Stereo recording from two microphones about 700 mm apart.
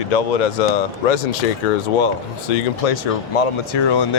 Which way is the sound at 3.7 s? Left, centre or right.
Left.